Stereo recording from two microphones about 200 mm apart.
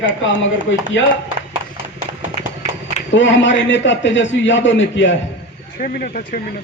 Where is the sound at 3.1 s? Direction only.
65° left (ahead or behind).